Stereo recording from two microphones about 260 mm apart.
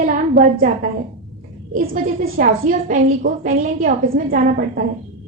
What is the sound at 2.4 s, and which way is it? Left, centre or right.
A woman's voice, right.